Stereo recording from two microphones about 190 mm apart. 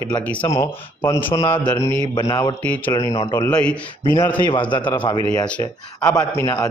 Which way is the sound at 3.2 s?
25° left (ahead or behind).